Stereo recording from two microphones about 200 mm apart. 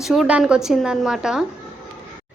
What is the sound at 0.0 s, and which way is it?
A woman's voice, centre (ahead or behind).